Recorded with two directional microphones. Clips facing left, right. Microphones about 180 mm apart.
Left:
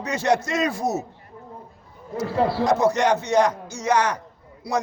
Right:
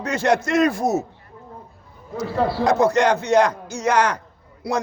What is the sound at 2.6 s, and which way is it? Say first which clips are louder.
A man's voice: right 4 dB; 55° right (ahead or behind).